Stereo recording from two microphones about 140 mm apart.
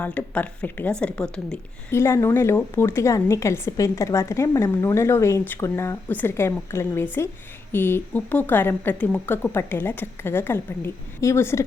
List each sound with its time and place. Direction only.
0.0 s speech: 10° left (ahead or behind)
1.9 s a woman's voice: 20° left (ahead or behind)